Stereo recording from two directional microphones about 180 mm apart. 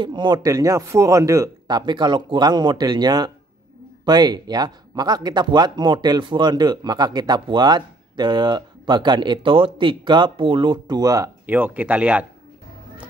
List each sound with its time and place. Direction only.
0.0 s speech: 25° right (ahead or behind); by 12.3 s 5° right (ahead or behind)